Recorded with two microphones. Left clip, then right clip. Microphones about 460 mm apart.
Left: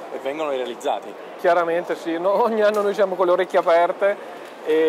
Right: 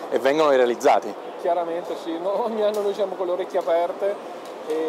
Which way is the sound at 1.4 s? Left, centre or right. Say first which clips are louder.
Left 5 dB; left.